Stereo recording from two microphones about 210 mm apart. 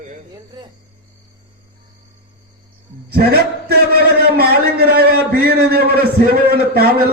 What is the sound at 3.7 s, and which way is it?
A man's voice, 50° right (ahead or behind).